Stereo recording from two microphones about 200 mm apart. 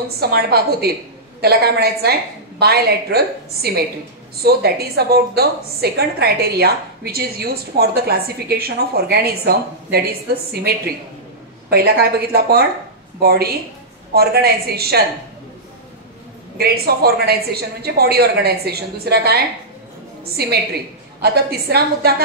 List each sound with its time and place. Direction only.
0.2 s a woman's voice: 50° right (ahead or behind)
11.7 s a woman's voice: 50° right (ahead or behind)
16.5 s a woman's voice: 50° right (ahead or behind)